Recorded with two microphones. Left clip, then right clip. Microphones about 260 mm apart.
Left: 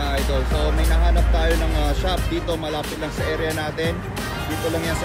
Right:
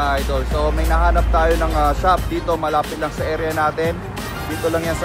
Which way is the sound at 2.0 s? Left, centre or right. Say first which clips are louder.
Right 7 dB; centre.